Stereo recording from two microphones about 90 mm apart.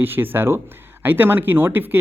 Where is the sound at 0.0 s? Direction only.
25° right (ahead or behind).